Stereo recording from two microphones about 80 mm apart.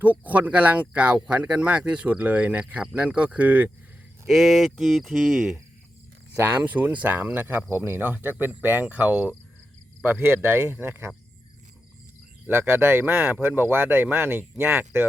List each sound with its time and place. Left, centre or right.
0.0 s speech: right
4.3 s speech: centre
6.3 s speech: right
12.5 s speech: right